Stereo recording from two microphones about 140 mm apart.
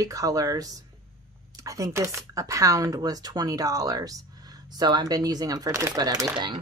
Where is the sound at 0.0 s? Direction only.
25° right (ahead or behind).